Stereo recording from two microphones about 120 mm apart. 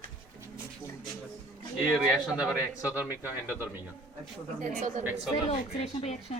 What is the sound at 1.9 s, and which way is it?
A man's voice, 5° right (ahead or behind).